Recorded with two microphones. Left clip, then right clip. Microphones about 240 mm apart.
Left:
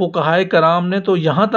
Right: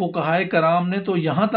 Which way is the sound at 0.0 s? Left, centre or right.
Left.